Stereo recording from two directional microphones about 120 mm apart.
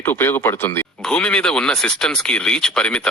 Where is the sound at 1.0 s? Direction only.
10° left (ahead or behind).